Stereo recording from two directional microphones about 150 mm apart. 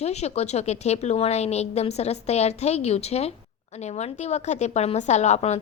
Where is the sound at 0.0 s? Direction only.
45° left (ahead or behind).